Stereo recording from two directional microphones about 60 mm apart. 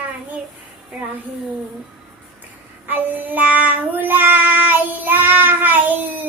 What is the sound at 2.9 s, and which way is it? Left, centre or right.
Child singing, right.